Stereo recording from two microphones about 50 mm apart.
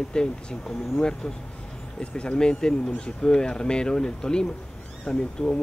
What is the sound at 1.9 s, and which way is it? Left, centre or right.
Speech, centre.